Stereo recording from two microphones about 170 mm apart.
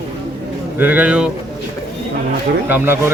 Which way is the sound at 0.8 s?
10° right (ahead or behind).